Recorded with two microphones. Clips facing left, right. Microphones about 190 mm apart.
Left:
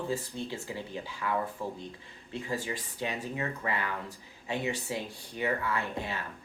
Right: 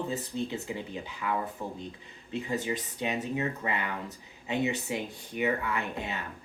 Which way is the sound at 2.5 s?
20° right (ahead or behind).